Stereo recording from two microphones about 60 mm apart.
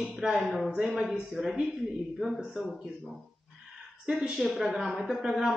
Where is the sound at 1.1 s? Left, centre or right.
Centre.